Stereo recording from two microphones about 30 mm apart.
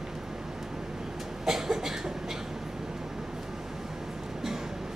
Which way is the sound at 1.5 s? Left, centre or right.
Centre.